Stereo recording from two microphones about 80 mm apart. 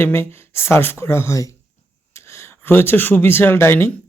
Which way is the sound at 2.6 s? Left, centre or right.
Left.